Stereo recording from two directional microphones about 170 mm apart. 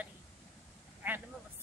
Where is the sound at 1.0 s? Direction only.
10° right (ahead or behind).